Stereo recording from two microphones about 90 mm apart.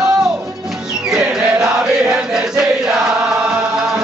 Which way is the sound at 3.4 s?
10° right (ahead or behind).